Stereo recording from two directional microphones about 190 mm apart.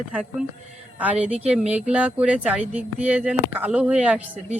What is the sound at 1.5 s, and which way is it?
A woman's voice, 5° right (ahead or behind).